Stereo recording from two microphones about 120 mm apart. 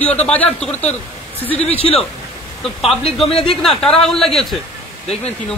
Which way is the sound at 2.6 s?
Centre (ahead or behind).